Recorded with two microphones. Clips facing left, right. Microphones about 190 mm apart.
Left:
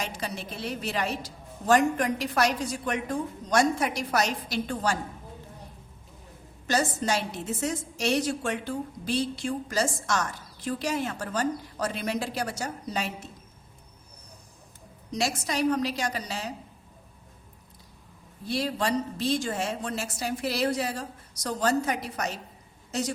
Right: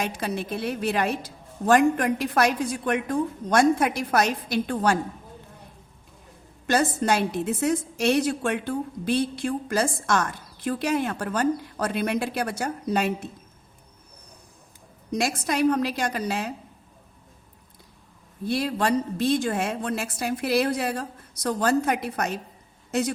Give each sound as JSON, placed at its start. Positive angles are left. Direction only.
{"t": 0.0, "sound": "a woman's voice", "side_deg": -55}
{"t": 6.7, "sound": "a woman's voice", "side_deg": -55}
{"t": 15.1, "sound": "a woman's voice", "side_deg": -55}
{"t": 18.4, "sound": "a woman's voice", "side_deg": -55}